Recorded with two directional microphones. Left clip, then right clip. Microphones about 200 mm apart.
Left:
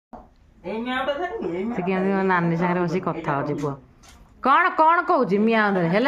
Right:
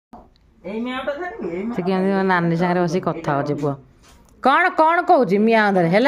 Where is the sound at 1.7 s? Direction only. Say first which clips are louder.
Right 4 dB; 20° right (ahead or behind).